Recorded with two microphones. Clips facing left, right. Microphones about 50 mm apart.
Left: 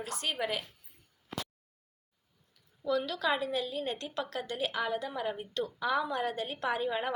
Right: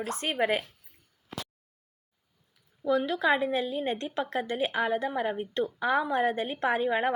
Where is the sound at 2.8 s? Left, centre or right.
Right.